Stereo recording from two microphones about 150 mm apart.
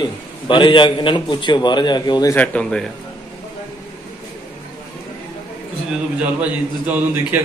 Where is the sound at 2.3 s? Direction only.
10° left (ahead or behind).